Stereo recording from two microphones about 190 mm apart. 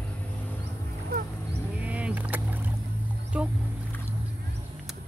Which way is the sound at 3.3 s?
5° right (ahead or behind).